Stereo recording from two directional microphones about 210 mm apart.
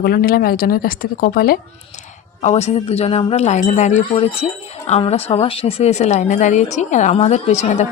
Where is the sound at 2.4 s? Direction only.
30° left (ahead or behind).